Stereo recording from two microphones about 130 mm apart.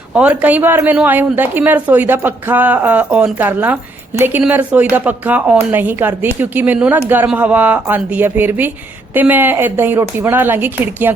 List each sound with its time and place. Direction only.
0.1 s a woman's voice: 10° right (ahead or behind)